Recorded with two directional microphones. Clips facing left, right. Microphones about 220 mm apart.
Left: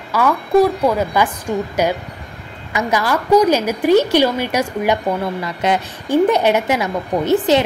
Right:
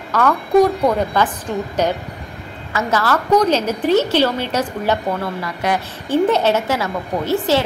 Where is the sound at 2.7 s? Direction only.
15° left (ahead or behind).